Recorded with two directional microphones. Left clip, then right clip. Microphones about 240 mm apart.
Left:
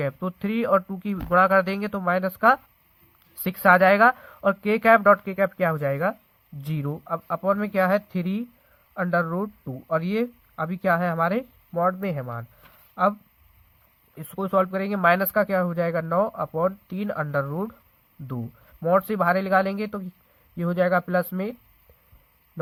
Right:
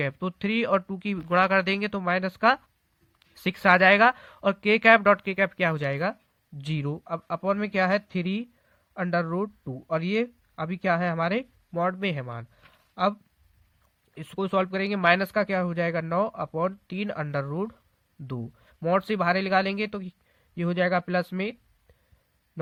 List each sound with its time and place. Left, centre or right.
0.0 s speech: right
12.9 s a sound: right
14.2 s speech: right